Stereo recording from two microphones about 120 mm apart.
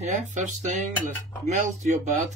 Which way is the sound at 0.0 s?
85° right.